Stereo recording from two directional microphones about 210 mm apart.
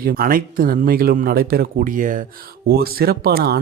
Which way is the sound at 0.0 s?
45° right (ahead or behind).